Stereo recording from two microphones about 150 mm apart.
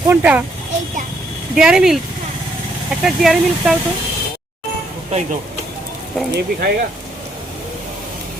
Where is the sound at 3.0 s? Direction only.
5° right (ahead or behind).